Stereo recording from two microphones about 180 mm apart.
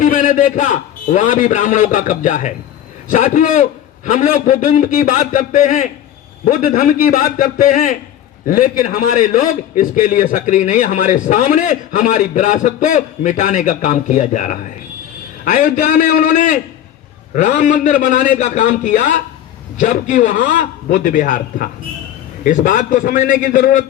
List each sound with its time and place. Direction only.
0.0 s a man's voice: 50° left (ahead or behind)